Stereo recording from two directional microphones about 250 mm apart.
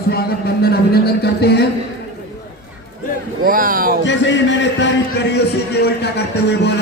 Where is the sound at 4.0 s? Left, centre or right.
Left.